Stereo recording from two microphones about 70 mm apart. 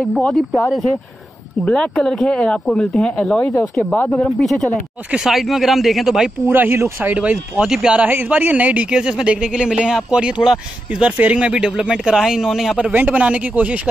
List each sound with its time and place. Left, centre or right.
1.7 s speech: centre
4.4 s speech: centre
6.4 s speech: right
7.1 s a man's voice: centre
8.0 s a man's voice: right
11.1 s a man's voice: right; by 12.7 s centre
12.7 s speech: centre